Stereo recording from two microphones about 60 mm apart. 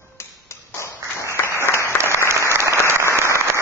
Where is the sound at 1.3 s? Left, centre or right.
Left.